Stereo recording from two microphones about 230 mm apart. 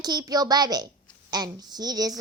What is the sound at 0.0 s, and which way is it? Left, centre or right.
Speech, centre.